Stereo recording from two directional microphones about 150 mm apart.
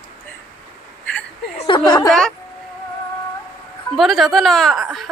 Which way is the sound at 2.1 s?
5° left (ahead or behind).